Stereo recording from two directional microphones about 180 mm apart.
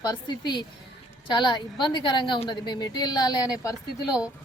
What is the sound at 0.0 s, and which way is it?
Speech, 25° left (ahead or behind).